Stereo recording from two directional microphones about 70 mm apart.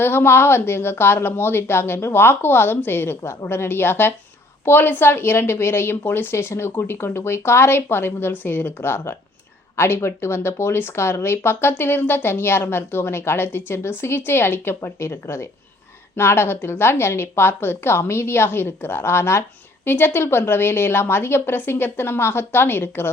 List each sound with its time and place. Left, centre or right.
0.0 s a woman's voice: left